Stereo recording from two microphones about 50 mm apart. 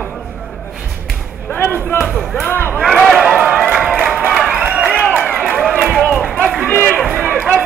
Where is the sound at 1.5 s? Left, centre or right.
Left.